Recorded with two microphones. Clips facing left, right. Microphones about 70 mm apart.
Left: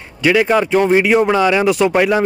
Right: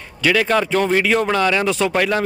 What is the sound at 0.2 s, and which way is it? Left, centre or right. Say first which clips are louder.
Speech: left 4 dB; centre.